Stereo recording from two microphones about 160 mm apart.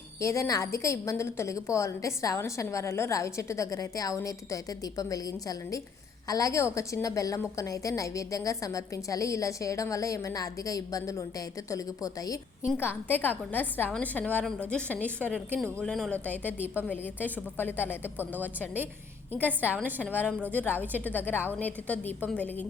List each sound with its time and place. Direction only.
0.2 s a woman's voice: 20° left (ahead or behind)
14.9 s a woman's voice: 10° right (ahead or behind)
15.6 s a woman's voice: 5° left (ahead or behind)
19.3 s a woman's voice: 10° right (ahead or behind)
21.0 s a woman's voice: 10° left (ahead or behind)